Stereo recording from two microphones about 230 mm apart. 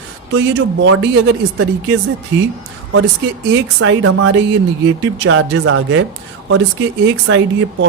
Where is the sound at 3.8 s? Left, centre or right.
Right.